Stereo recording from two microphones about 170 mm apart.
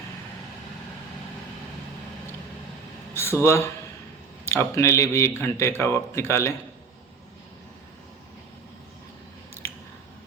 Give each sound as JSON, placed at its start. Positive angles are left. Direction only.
{"t": 3.2, "sound": "speech", "side_deg": 15}
{"t": 9.6, "sound": "scissors", "side_deg": 15}